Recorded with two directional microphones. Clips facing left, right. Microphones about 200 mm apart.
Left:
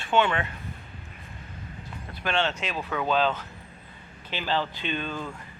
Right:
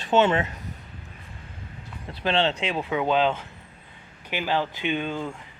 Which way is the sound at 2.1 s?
30° right (ahead or behind).